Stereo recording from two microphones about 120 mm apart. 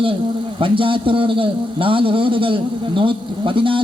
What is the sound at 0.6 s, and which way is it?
A man's voice, 45° right (ahead or behind).